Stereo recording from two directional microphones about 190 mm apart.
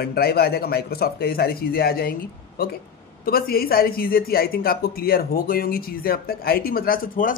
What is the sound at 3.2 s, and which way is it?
Speech, 50° left (ahead or behind).